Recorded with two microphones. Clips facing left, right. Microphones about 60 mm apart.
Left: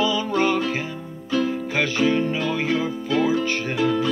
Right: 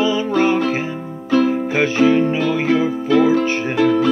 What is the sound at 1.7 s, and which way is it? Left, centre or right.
Music, right.